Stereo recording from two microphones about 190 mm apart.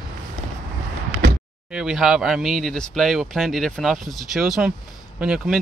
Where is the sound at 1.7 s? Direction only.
5° right (ahead or behind).